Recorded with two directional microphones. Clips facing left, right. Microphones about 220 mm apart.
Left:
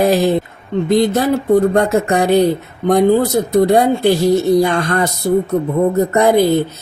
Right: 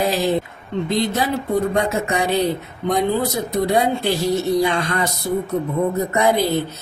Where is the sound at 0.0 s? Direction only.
50° left (ahead or behind).